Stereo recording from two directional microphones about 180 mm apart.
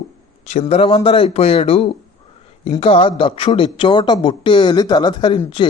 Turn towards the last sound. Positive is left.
turn(degrees=25)  # may be behind; listen again after turning